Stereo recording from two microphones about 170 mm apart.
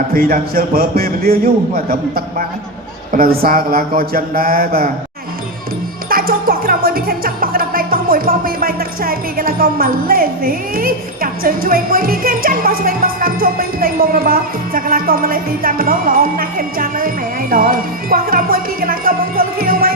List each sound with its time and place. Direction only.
0.1 s music: 60° right (ahead or behind)
6.1 s music: 60° right (ahead or behind)